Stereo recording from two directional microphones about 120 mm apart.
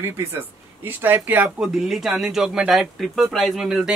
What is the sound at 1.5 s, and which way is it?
Speech, 5° right (ahead or behind).